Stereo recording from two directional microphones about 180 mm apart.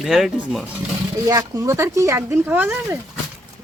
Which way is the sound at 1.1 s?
20° right (ahead or behind).